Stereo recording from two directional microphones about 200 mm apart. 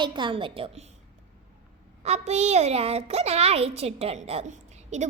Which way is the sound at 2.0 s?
30° right (ahead or behind).